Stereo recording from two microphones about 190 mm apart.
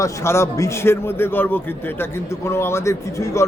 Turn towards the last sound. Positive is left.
turn(degrees=15)  # may be behind; listen again after turning